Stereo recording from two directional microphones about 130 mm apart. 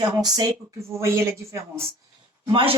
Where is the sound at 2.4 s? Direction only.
40° right (ahead or behind).